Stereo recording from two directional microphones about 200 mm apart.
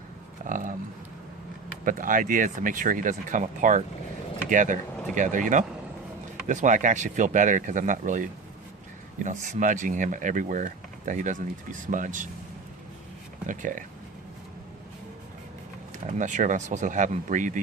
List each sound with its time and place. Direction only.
0.4 s a sound: 40° right (ahead or behind)
1.8 s speech: 45° right (ahead or behind)
13.5 s speech: 40° right (ahead or behind)
16.0 s speech: 40° right (ahead or behind)